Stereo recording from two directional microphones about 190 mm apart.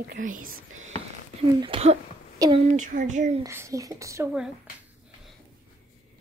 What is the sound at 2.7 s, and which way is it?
Speech, 40° right (ahead or behind).